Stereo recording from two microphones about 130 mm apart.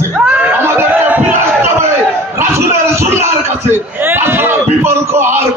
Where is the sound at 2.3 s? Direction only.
20° right (ahead or behind).